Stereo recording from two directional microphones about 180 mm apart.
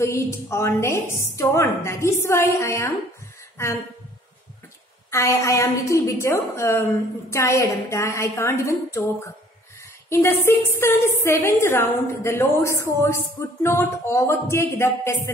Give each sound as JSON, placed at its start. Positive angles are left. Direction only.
{"t": 0.0, "sound": "a woman's voice", "side_deg": 15}
{"t": 5.1, "sound": "a woman's voice", "side_deg": 15}
{"t": 10.0, "sound": "a woman's voice", "side_deg": 15}